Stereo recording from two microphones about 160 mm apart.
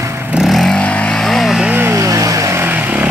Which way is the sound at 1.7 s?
15° right (ahead or behind).